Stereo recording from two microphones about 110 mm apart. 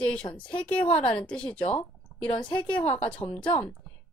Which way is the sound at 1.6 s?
60° left (ahead or behind).